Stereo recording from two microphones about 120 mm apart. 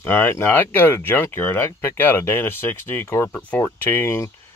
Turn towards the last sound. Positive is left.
turn(degrees=20)  # may be behind; listen again after turning